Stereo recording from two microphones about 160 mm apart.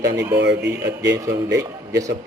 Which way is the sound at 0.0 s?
20° right (ahead or behind).